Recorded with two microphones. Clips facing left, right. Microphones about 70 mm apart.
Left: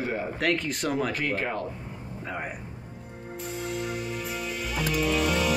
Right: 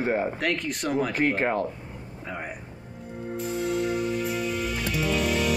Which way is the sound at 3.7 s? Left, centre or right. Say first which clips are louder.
Right 6 dB; centre.